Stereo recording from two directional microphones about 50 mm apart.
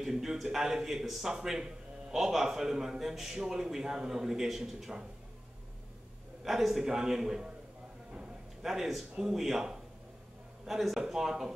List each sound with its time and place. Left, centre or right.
0.0 s a man's voice: centre
6.4 s a man's voice: centre
8.1 s a sound: centre
8.7 s a man's voice: centre